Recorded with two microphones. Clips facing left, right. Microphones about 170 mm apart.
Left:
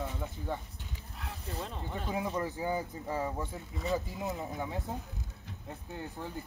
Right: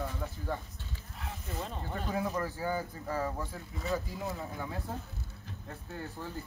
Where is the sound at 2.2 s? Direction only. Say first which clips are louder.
Even; 20° left (ahead or behind).